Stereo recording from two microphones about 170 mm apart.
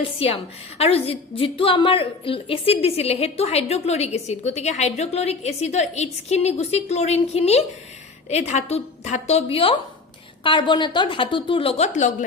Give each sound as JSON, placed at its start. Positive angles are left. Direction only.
{"t": 0.2, "sound": "a woman's voice", "side_deg": 35}